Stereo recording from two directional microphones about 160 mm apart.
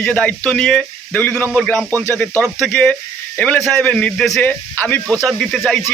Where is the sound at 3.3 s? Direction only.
10° left (ahead or behind).